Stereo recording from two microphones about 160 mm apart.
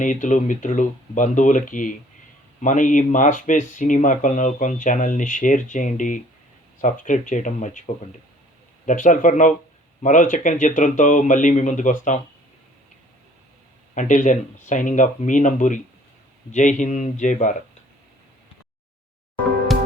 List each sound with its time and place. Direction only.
0.0 s speech: 50° left (ahead or behind)
8.9 s speech: 55° left (ahead or behind)
13.9 s speech: 50° left (ahead or behind)